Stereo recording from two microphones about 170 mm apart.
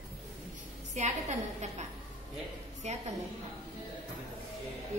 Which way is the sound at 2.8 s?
40° right (ahead or behind).